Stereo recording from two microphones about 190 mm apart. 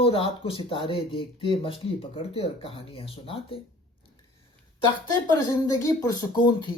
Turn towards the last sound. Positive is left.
turn(degrees=20)  # may be behind; listen again after turning